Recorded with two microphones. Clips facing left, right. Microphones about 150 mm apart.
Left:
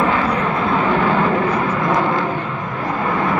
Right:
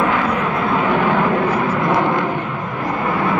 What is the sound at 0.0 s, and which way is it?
Vehicle, 10° right (ahead or behind).